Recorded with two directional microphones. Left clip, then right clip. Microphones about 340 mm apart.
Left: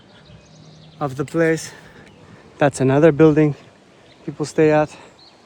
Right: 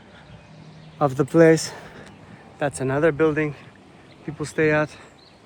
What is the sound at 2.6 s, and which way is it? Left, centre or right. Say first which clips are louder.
Speech: left 7 dB; left.